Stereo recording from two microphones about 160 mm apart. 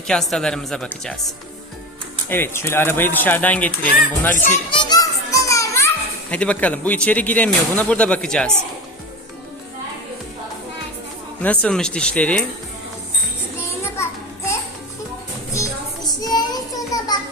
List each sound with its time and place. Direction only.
0.1 s a woman's voice: 5° left (ahead or behind)
2.3 s speech: 15° left (ahead or behind)
4.7 s children playing: 25° left (ahead or behind)
6.3 s speech: 10° left (ahead or behind)
11.4 s speech: 5° left (ahead or behind)
13.9 s a sound: 15° left (ahead or behind)
16.0 s child singing: 25° left (ahead or behind)